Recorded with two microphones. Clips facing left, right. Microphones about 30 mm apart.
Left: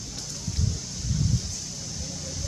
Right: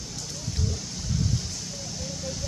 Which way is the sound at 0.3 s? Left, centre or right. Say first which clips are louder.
Even; centre.